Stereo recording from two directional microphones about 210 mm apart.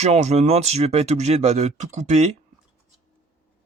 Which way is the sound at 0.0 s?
30° right (ahead or behind).